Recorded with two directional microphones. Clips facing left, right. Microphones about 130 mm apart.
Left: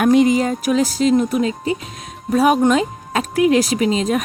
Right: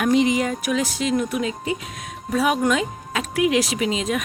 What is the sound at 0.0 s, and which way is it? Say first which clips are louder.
Speech: left 5 dB; 50° left (ahead or behind).